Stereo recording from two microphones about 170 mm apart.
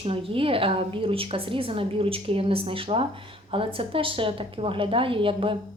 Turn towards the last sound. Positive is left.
turn(degrees=-30)  # may be behind; listen again after turning